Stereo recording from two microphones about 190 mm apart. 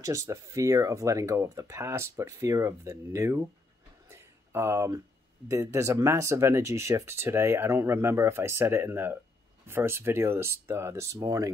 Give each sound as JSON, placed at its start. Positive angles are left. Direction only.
{"t": 0.0, "sound": "speech", "side_deg": -15}
{"t": 4.1, "sound": "a sound", "side_deg": -15}
{"t": 5.5, "sound": "speech", "side_deg": -15}